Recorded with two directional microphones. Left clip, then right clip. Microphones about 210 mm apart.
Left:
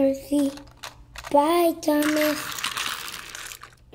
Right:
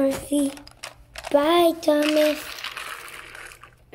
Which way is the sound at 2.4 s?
45° left (ahead or behind).